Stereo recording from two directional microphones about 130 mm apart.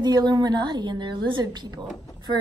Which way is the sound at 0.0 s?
35° right (ahead or behind).